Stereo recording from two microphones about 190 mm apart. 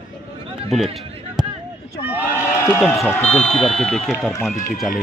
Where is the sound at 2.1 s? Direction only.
10° right (ahead or behind).